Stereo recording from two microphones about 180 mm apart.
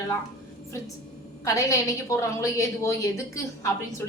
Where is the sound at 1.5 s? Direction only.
15° left (ahead or behind).